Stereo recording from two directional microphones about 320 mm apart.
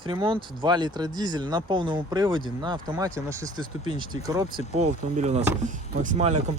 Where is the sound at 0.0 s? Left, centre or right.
Centre.